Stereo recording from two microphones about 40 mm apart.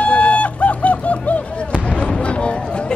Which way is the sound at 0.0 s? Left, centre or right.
Left.